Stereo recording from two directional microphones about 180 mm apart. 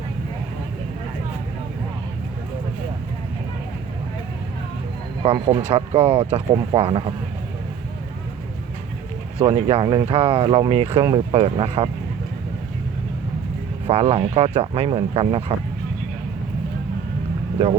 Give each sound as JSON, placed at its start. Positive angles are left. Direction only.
{"t": 5.2, "sound": "speech", "side_deg": -30}
{"t": 9.4, "sound": "speech", "side_deg": -30}
{"t": 13.8, "sound": "speech", "side_deg": -35}
{"t": 17.6, "sound": "speech", "side_deg": -30}